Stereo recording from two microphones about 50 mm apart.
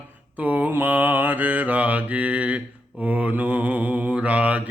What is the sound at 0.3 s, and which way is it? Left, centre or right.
Mantra, right.